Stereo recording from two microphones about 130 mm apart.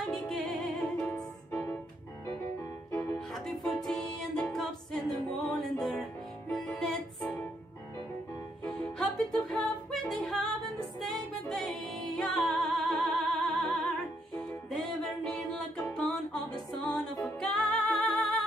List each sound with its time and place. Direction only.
0.1 s music: 5° left (ahead or behind)
2.9 s music: 15° left (ahead or behind)
3.2 s music: 5° left (ahead or behind)
8.6 s music: 5° left (ahead or behind)
15.0 s music: 5° left (ahead or behind)